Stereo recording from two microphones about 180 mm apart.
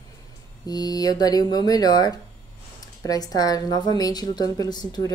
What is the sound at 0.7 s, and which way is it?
Speech, 20° left (ahead or behind).